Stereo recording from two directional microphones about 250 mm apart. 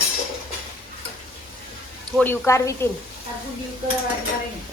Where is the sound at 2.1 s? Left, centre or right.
Centre.